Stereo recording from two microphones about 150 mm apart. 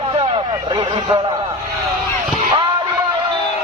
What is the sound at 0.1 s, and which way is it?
Vehicle, 35° right (ahead or behind).